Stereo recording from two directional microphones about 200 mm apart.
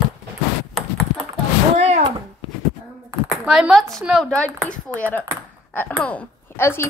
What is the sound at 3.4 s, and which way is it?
Speech, 5° right (ahead or behind).